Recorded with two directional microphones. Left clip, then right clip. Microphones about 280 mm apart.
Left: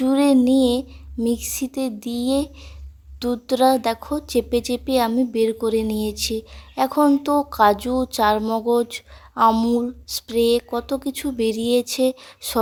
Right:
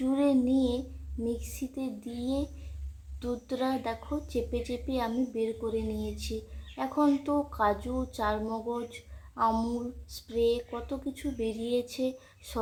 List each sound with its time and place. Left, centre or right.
0.0 s child singing: left
1.2 s speech: left